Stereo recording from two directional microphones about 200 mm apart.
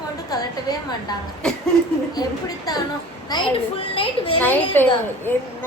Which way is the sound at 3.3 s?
20° left (ahead or behind).